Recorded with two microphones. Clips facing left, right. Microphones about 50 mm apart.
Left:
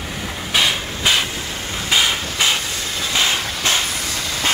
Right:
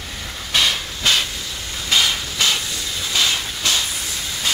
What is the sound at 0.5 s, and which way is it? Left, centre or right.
Train, centre.